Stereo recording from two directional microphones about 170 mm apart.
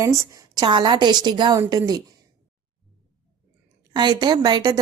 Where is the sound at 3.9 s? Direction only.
25° right (ahead or behind).